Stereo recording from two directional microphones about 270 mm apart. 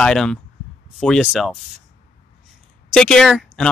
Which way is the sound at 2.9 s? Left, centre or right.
Centre.